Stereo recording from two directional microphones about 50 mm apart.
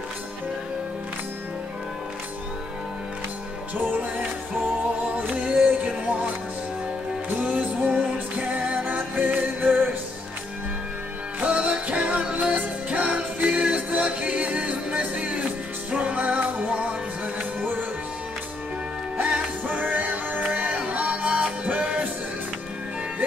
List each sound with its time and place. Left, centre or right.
5.0 s music: right
5.4 s music: centre
7.3 s music: right
11.4 s music: right
19.2 s music: right